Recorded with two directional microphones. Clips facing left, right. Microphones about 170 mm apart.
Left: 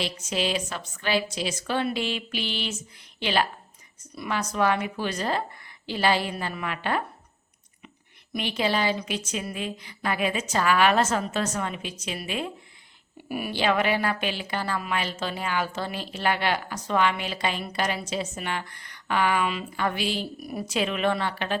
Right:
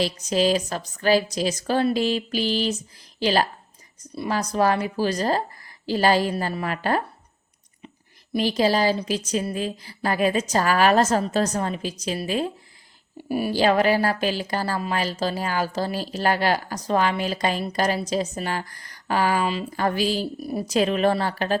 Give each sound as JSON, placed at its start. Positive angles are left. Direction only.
{"t": 0.0, "sound": "speech", "side_deg": -40}
{"t": 8.3, "sound": "speech", "side_deg": -35}